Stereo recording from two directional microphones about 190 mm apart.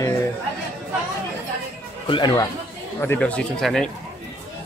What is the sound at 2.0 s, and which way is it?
Speech, 25° left (ahead or behind).